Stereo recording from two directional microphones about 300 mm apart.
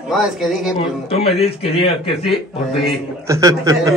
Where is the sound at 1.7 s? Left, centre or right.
Centre.